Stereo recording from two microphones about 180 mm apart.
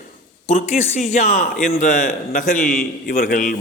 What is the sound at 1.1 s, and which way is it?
A man's voice, 40° left (ahead or behind).